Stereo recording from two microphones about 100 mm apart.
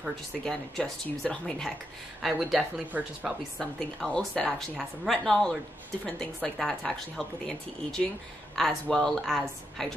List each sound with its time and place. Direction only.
0.5 s speech: 5° left (ahead or behind)
2.9 s speech: 15° right (ahead or behind)
3.5 s speech: 5° left (ahead or behind)